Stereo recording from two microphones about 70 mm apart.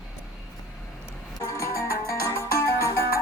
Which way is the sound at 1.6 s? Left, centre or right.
Left.